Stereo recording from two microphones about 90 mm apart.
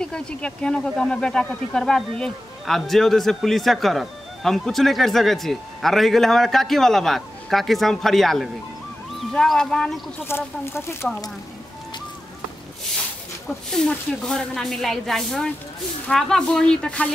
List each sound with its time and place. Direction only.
0.0 s speech: 10° left (ahead or behind)
10.2 s speech: 25° left (ahead or behind)
13.7 s speech: 5° left (ahead or behind)